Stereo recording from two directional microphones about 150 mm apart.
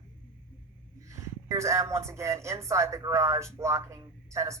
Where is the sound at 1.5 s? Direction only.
20° right (ahead or behind).